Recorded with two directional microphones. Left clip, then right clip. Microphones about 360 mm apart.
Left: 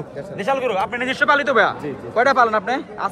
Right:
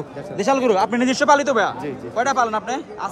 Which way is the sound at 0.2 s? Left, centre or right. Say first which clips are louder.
Right 2 dB; centre.